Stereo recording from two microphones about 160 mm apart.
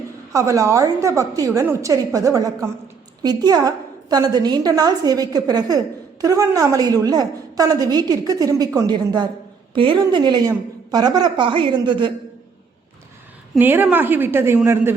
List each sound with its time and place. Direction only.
0.3 s a woman's voice: 20° right (ahead or behind)
13.6 s a woman's voice: 10° right (ahead or behind)